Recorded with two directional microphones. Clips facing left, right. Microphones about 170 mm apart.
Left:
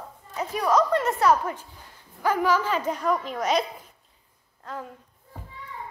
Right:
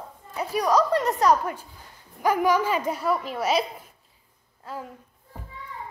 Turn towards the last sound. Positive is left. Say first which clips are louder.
# even
turn(degrees=-5)  # may be behind; listen again after turning